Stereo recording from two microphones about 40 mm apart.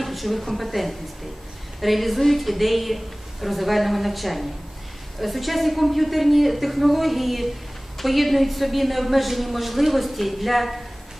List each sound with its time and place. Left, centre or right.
0.0 s a woman's voice: centre